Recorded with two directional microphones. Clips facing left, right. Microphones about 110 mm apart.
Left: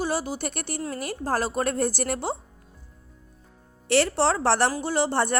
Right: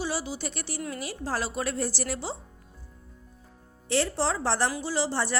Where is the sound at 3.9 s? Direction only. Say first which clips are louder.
Left 5 dB; 70° left (ahead or behind).